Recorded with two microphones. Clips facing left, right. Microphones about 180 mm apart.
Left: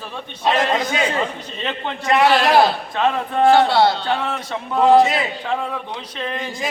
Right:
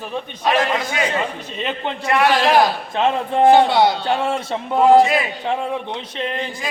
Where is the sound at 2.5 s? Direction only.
20° right (ahead or behind).